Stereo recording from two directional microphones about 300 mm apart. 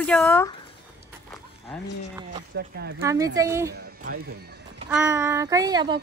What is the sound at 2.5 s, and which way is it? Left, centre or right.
Speech, right.